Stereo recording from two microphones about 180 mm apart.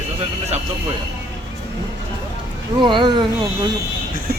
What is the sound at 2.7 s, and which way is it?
Speech, 25° right (ahead or behind).